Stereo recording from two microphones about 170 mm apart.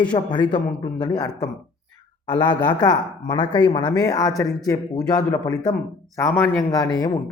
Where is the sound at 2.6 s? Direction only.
25° left (ahead or behind).